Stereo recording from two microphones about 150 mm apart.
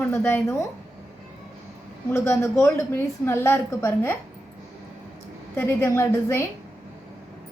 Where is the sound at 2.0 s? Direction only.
20° left (ahead or behind).